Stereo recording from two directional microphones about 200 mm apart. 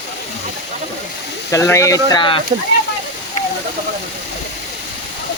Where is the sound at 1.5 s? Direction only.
15° left (ahead or behind).